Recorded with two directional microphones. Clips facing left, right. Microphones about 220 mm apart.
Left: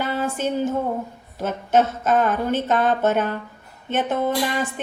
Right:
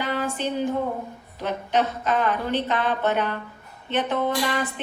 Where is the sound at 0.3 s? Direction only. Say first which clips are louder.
Left 3 dB; 45° left (ahead or behind).